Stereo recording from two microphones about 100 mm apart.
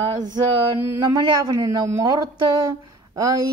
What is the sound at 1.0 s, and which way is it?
Speech, 45° right (ahead or behind).